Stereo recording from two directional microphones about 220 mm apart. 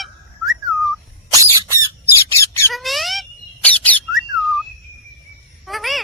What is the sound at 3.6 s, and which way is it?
Bird, 5° left (ahead or behind).